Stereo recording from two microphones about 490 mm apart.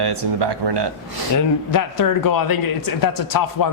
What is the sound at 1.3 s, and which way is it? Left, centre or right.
Speech, left.